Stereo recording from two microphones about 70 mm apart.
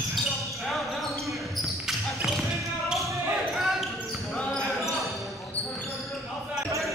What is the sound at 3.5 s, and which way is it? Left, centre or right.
Basketball bounce, centre.